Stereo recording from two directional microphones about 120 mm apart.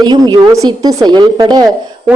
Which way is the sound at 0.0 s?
35° right (ahead or behind).